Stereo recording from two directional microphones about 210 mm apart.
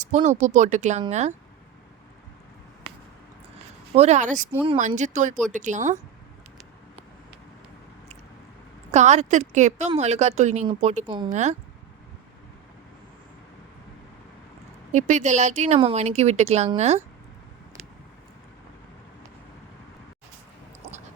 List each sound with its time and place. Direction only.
0.0 s speech: 35° right (ahead or behind)
3.9 s speech: 30° right (ahead or behind)
8.9 s speech: 35° right (ahead or behind)
11.3 s speech: 35° right (ahead or behind)
14.9 s speech: 35° right (ahead or behind)